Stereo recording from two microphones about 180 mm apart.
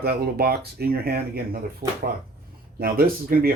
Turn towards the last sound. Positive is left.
turn(degrees=-55)  # may be behind; listen again after turning